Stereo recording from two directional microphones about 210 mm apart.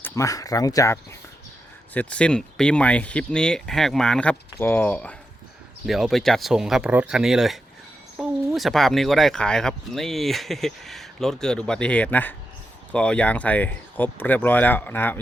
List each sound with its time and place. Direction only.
0.0 s speech: 15° left (ahead or behind)